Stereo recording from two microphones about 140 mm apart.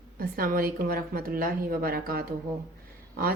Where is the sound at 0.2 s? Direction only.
90° right.